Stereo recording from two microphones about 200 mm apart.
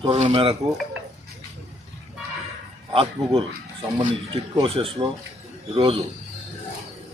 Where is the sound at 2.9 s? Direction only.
30° right (ahead or behind).